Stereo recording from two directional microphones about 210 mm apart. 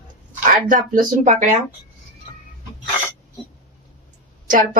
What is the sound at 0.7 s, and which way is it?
Speech, 35° right (ahead or behind).